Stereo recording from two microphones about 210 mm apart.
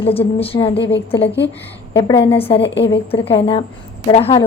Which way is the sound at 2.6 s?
55° left (ahead or behind).